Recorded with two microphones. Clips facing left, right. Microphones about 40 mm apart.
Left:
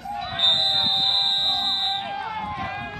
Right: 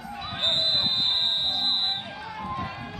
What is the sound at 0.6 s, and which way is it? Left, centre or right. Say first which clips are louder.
Music: left 3 dB; left.